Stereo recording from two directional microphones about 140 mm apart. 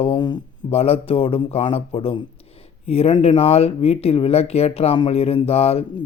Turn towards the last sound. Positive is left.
turn(degrees=45)  # may be behind; listen again after turning